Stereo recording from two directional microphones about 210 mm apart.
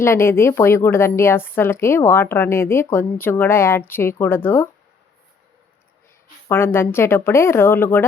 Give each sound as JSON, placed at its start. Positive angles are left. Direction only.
{"t": 0.0, "sound": "a woman's voice", "side_deg": 10}
{"t": 6.5, "sound": "a woman's voice", "side_deg": 10}